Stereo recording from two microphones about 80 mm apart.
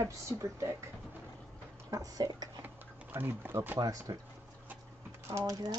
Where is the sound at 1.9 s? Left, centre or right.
Right.